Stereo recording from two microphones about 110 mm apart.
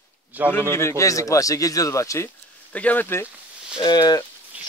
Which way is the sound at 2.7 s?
15° left (ahead or behind).